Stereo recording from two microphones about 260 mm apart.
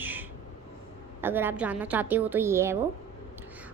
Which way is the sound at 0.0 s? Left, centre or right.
Centre.